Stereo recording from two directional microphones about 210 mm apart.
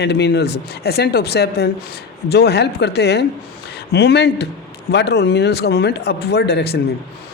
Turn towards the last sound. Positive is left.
turn(degrees=55)  # may be behind; listen again after turning